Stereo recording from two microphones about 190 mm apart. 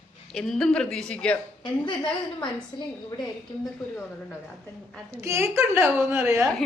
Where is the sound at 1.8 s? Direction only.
25° left (ahead or behind).